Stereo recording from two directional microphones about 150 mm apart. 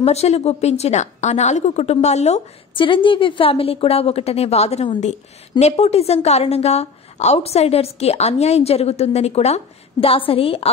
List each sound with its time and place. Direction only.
0.0 s a woman's voice: 45° left (ahead or behind)
2.7 s a woman's voice: 35° left (ahead or behind)